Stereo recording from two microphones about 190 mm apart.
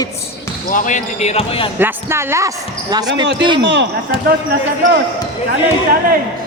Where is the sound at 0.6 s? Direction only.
45° left (ahead or behind).